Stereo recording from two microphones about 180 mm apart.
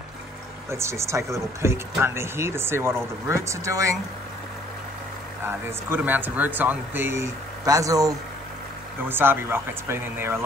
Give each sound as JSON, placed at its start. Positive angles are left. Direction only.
{"t": 0.7, "sound": "speech", "side_deg": -15}
{"t": 5.4, "sound": "speech", "side_deg": -10}